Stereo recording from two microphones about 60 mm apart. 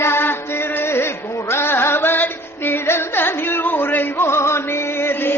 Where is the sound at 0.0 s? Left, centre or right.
Left.